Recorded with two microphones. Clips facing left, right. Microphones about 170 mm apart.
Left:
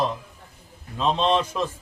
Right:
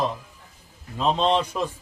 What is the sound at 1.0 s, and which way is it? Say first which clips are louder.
Mantra: even; 15° right (ahead or behind).